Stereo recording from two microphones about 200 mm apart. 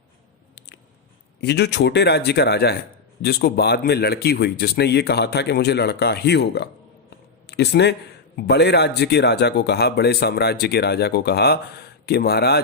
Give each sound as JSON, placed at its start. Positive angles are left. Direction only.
{"t": 1.4, "sound": "a man's voice", "side_deg": 55}